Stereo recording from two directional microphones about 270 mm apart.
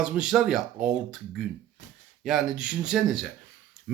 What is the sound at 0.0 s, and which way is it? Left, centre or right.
Speech, centre.